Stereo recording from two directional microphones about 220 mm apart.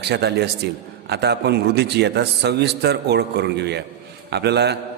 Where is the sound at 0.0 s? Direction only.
50° right (ahead or behind).